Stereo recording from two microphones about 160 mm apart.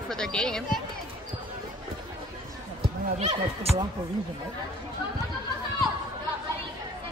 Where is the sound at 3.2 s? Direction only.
40° right (ahead or behind).